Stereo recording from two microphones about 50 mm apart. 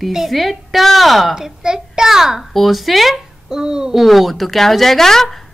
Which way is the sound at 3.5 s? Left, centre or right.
Centre.